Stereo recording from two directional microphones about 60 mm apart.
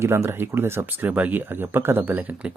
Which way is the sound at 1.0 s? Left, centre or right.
Right.